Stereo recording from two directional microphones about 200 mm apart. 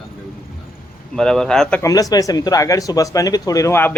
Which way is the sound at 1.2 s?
5° left (ahead or behind).